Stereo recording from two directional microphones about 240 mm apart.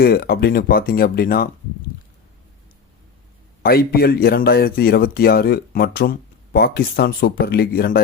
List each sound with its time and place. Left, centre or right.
0.0 s a man's voice: left
3.6 s a man's voice: left